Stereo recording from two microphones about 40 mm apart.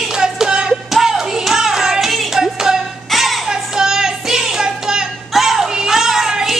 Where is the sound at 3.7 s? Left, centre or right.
Centre.